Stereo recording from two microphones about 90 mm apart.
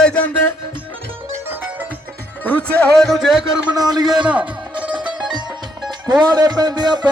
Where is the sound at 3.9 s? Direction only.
50° right (ahead or behind).